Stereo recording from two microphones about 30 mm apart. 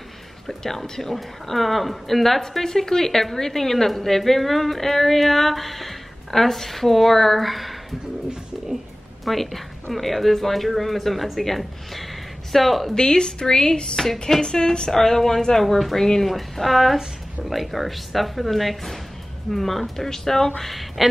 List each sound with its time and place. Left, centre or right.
0.5 s a woman's voice: centre
9.2 s speech: centre
12.9 s speech: left
13.9 s a woman's voice: centre
14.4 s speech: left
14.9 s a woman's voice: centre
16.3 s a woman's voice: centre
21.0 s speech: centre